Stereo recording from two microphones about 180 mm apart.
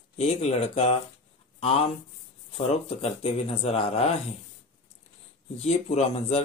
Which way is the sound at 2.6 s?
35° left (ahead or behind).